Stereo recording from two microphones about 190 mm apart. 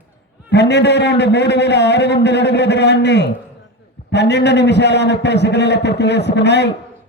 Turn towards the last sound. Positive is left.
turn(degrees=65)  # may be behind; listen again after turning